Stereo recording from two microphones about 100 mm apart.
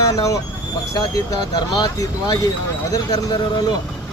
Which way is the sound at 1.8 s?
45° left (ahead or behind).